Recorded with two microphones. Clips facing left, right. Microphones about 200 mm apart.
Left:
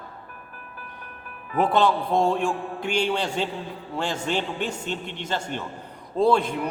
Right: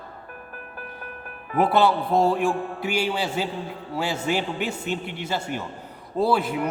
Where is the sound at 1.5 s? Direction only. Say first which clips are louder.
Right 1 dB; 5° right (ahead or behind).